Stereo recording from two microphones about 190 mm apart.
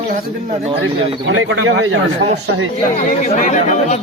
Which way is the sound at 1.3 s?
85° right.